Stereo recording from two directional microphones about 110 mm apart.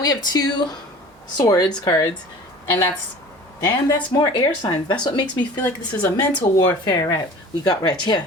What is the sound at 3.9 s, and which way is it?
Speech, 45° left (ahead or behind).